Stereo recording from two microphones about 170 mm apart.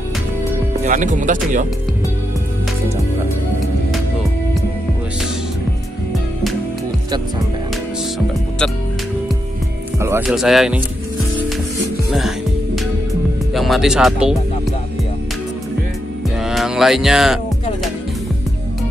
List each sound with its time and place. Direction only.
0.8 s speech: 45° right (ahead or behind)
9.9 s music: 15° right (ahead or behind)
10.2 s music: centre (ahead or behind)
13.6 s speech: centre (ahead or behind)
16.3 s music: centre (ahead or behind)